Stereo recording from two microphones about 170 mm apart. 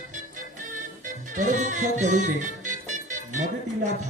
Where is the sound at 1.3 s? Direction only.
45° right (ahead or behind).